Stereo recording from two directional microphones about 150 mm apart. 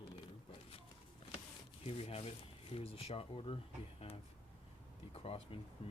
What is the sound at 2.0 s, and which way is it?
Speech, 40° left (ahead or behind).